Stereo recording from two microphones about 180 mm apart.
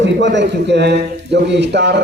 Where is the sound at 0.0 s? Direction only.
80° right.